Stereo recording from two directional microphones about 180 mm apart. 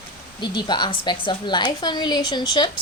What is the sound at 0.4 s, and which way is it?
A woman's voice, 25° left (ahead or behind).